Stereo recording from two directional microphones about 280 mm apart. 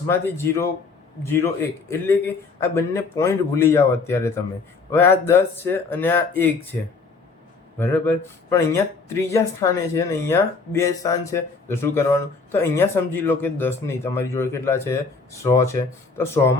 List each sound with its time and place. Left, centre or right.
0.1 s speech: centre
7.8 s speech: centre